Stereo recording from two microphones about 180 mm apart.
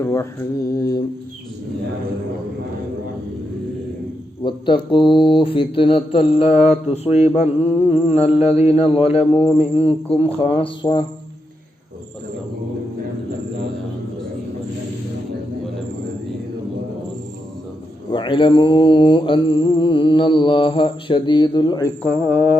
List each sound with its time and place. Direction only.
0.0 s mantra: 15° left (ahead or behind)
4.4 s mantra: 25° left (ahead or behind)
7.4 s mantra: 10° right (ahead or behind)
8.4 s speech: 35° left (ahead or behind)
18.1 s mantra: 25° left (ahead or behind)
22.0 s speech: centre (ahead or behind)
22.3 s mantra: 10° right (ahead or behind)